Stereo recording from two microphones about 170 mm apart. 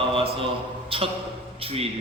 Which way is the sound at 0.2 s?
30° right (ahead or behind).